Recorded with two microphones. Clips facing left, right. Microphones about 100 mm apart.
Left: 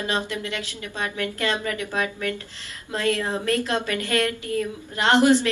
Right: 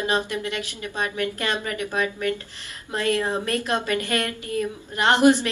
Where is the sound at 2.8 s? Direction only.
20° right (ahead or behind).